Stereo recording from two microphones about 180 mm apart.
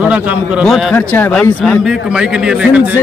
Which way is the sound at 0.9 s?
10° left (ahead or behind).